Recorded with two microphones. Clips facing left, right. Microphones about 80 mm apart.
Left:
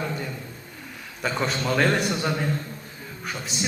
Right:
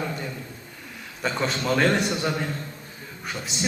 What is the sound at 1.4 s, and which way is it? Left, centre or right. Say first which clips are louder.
A man's voice: even; centre.